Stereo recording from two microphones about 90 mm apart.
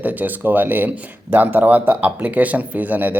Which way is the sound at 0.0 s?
20° right (ahead or behind).